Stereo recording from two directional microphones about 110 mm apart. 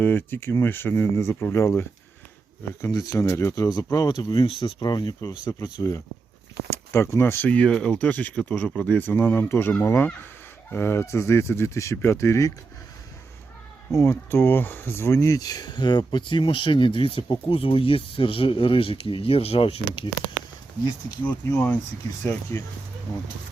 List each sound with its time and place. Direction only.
0.0 s speech: 20° left (ahead or behind)
13.9 s speech: 20° left (ahead or behind); by 20.3 s 55° left (ahead or behind)
21.2 s speech: 15° left (ahead or behind)